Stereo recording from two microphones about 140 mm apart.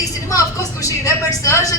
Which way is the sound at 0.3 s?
25° left (ahead or behind).